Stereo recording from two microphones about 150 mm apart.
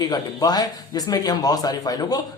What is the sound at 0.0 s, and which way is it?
A man's voice, 25° left (ahead or behind).